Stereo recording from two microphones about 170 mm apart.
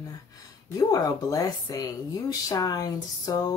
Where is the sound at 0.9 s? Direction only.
20° left (ahead or behind).